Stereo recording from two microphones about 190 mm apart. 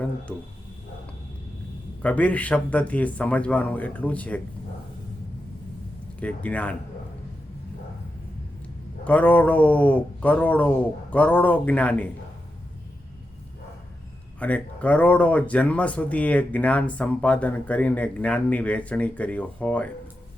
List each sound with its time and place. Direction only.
2.0 s speech: 5° left (ahead or behind)
6.1 s speech: 5° left (ahead or behind)
9.0 s speech: 10° left (ahead or behind)
14.3 s speech: 5° left (ahead or behind)